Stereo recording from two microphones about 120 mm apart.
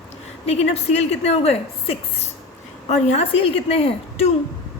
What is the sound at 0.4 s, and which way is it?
A woman's voice, 60° left (ahead or behind).